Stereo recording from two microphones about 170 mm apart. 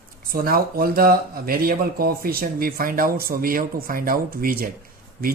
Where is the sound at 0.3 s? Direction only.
60° right (ahead or behind).